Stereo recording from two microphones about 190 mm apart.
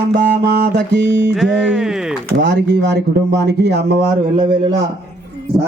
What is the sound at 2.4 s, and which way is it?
A man's voice, 65° right (ahead or behind).